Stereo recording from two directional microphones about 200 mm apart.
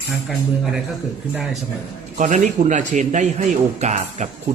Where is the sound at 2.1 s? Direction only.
40° right (ahead or behind).